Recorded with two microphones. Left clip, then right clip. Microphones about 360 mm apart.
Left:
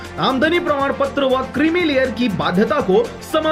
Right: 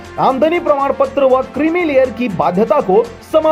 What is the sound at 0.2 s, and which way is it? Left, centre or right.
Speech, right.